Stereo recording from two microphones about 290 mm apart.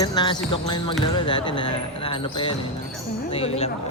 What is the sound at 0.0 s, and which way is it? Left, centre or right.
Speech, centre.